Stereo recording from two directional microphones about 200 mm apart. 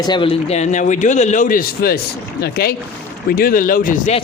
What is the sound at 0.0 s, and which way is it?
A man's voice, 25° left (ahead or behind).